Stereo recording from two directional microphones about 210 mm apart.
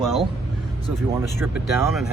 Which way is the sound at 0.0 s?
Centre (ahead or behind).